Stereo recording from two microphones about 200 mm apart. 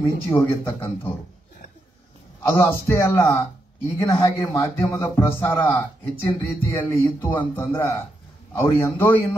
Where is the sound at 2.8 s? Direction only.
15° left (ahead or behind).